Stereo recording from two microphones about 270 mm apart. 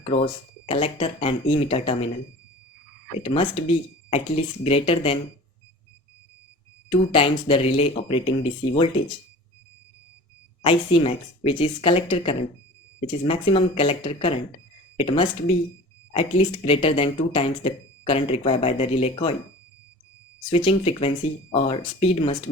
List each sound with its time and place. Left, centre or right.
0.0 s speech: left
3.2 s speech: centre
7.1 s speech: centre
10.6 s speech: centre
20.7 s speech: left